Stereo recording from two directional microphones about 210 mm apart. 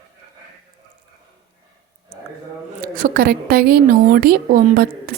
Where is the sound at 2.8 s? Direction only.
40° right (ahead or behind).